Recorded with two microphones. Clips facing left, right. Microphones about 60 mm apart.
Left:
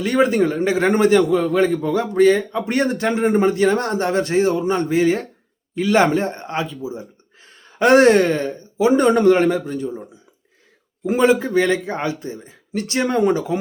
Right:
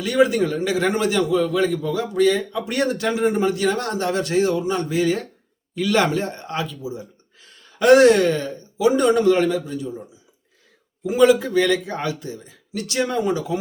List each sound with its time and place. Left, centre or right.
0.0 s a man's voice: left